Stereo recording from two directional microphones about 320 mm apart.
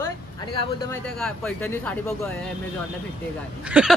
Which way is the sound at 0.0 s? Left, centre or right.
Centre.